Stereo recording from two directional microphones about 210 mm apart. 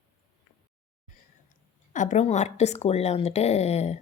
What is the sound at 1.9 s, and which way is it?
Speech, 35° left (ahead or behind).